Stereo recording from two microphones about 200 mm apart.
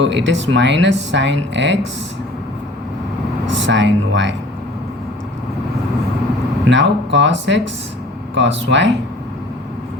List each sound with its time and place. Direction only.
0.0 s speech: 65° right (ahead or behind)
3.5 s speech: 65° right (ahead or behind)
6.7 s speech: 65° right (ahead or behind)